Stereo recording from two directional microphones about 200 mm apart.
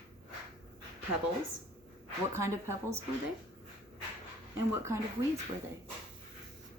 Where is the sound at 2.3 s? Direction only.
15° right (ahead or behind).